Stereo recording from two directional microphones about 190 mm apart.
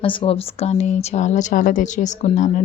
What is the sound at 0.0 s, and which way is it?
Speech, 25° left (ahead or behind).